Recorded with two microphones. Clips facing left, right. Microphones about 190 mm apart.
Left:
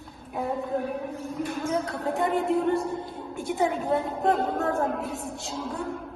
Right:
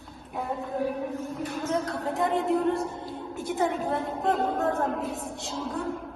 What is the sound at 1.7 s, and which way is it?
Speech, centre (ahead or behind).